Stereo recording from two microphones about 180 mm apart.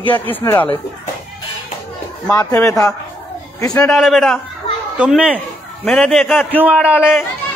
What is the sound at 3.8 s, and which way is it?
Speech, centre (ahead or behind).